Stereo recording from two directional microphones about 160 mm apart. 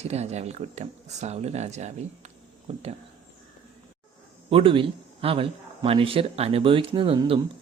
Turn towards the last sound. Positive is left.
turn(degrees=-35)  # may be behind; listen again after turning